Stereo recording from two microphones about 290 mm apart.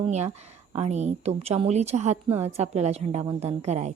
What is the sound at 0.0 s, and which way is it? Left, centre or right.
A woman's voice, right.